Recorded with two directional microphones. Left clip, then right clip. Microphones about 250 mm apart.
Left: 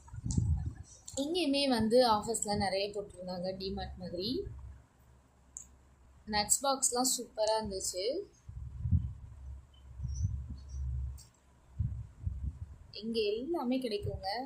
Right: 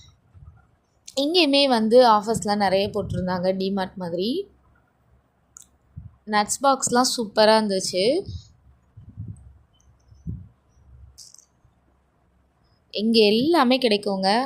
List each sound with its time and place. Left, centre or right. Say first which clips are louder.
1.0 s a woman's voice: right 14 dB; right
6.2 s a woman's voice: right 12 dB; right
12.9 s a woman's voice: right 15 dB; right